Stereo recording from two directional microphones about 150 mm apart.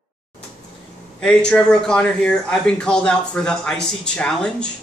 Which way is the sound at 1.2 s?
5° left (ahead or behind).